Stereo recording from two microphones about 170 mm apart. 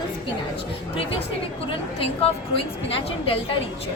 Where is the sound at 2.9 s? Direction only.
35° left (ahead or behind).